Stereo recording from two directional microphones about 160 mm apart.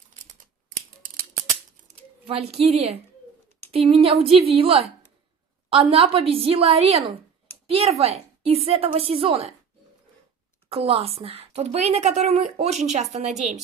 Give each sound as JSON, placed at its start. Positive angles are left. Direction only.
{"t": 1.9, "sound": "a woman's voice", "side_deg": -40}
{"t": 10.7, "sound": "a woman's voice", "side_deg": -35}